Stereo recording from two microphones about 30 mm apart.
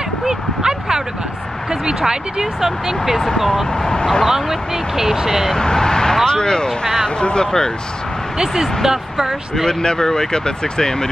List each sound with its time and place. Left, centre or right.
0.2 s a sound: centre
1.7 s speech: right
2.6 s speech: centre
3.7 s speech: left
4.3 s speech: centre
5.5 s speech: left
8.8 s speech: centre
9.7 s speech: left